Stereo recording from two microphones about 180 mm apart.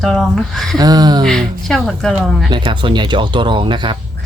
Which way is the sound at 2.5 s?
25° right (ahead or behind).